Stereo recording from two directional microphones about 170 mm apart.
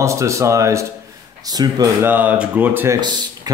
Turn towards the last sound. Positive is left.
turn(degrees=-25)  # may be behind; listen again after turning